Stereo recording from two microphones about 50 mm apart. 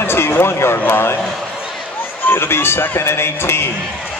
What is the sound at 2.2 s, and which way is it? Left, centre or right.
A man's voice, left.